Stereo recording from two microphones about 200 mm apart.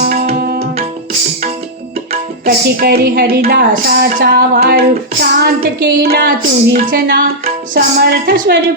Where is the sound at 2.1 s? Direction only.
50° right (ahead or behind).